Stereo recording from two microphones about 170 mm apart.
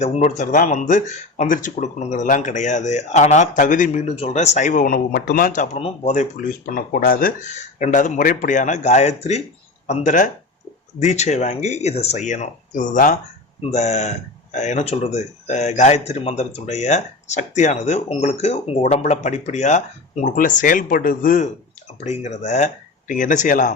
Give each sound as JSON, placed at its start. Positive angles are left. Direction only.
{"t": 0.0, "sound": "speech", "side_deg": 40}
{"t": 6.7, "sound": "speech", "side_deg": 55}